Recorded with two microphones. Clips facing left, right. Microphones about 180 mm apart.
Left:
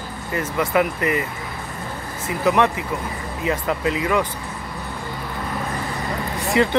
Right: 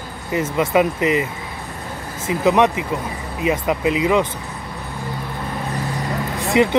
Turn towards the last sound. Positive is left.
turn(degrees=-20)  # may be behind; listen again after turning